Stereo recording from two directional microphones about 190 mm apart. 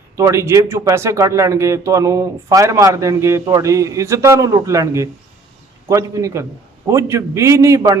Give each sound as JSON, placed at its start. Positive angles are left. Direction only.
{"t": 0.2, "sound": "speech", "side_deg": -15}